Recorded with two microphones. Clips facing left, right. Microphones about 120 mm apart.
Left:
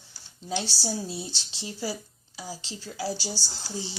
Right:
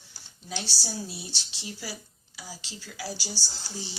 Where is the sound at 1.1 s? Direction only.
25° left (ahead or behind).